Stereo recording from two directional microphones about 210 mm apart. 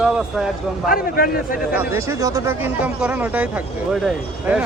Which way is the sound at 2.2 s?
15° right (ahead or behind).